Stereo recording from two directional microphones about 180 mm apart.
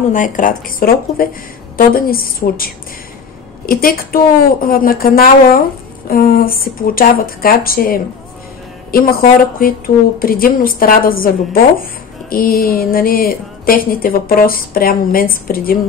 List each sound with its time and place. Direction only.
0.1 s a woman's voice: 45° left (ahead or behind)